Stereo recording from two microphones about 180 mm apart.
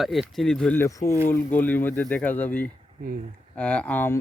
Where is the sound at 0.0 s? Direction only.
Centre (ahead or behind).